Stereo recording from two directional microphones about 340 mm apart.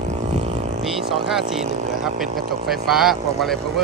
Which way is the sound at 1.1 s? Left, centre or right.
Centre.